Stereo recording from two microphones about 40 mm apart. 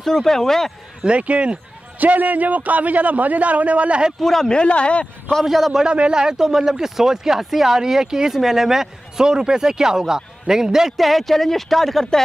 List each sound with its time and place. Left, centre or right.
0.0 s speech: centre
1.0 s speech: right
2.0 s a man's voice: right
4.2 s speech: centre
4.5 s speech: left
5.4 s speech: centre
5.9 s speech: right
11.0 s speech: centre